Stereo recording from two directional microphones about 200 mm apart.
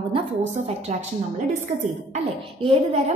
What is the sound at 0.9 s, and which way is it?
Speech, 35° right (ahead or behind).